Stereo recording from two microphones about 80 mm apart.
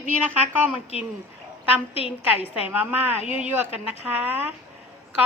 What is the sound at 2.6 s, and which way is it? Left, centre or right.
A woman's voice, right.